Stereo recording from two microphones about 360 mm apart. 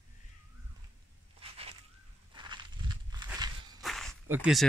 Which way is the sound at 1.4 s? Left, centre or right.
Centre.